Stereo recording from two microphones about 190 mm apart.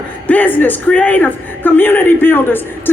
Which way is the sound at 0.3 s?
10° left (ahead or behind).